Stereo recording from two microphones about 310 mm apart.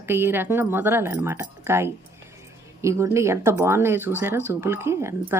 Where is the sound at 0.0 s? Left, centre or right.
Centre.